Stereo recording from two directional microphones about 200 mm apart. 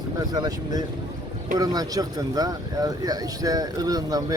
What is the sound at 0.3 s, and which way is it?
Speech, 20° right (ahead or behind).